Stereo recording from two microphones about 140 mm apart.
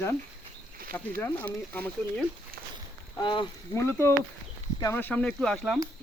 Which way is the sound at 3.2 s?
35° left (ahead or behind).